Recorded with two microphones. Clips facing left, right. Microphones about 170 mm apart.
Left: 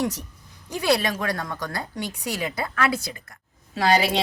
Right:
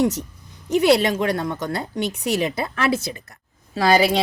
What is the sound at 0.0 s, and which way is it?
A woman's voice, 25° right (ahead or behind).